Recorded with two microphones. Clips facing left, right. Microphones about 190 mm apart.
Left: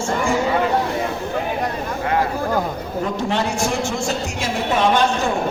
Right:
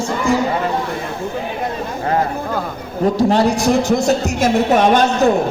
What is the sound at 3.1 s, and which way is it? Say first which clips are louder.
A woman's voice: right 8 dB; 35° right (ahead or behind).